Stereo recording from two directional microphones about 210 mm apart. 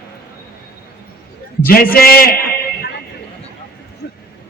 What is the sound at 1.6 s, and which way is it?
Speech, 45° left (ahead or behind).